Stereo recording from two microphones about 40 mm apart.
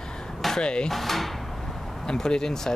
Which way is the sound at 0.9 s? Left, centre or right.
Centre.